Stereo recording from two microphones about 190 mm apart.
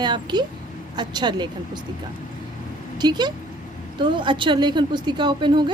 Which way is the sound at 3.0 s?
20° right (ahead or behind).